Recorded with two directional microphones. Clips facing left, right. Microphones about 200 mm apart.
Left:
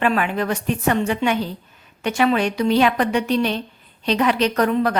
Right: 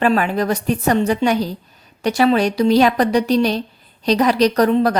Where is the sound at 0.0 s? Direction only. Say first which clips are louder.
Right 4 dB; 35° right (ahead or behind).